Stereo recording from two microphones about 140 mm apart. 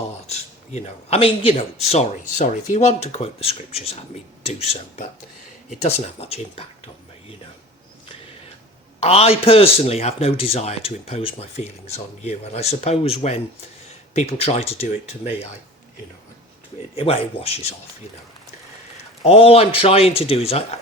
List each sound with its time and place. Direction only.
0.3 s a man's voice: 50° left (ahead or behind)
2.4 s a man's voice: 60° left (ahead or behind); by 7.3 s 45° left (ahead or behind)
9.0 s a man's voice: 45° left (ahead or behind)
16.9 s a man's voice: 40° left (ahead or behind)
19.2 s a man's voice: 45° left (ahead or behind)